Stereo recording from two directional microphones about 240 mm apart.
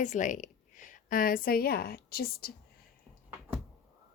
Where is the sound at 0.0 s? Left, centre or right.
Left.